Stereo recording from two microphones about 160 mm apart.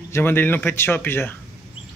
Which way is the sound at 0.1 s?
15° left (ahead or behind).